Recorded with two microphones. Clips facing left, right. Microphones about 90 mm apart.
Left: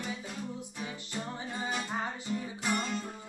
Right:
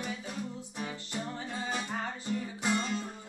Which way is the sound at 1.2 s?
15° left (ahead or behind).